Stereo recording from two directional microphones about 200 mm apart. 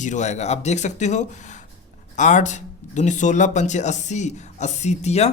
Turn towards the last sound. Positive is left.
turn(degrees=35)  # may be behind; listen again after turning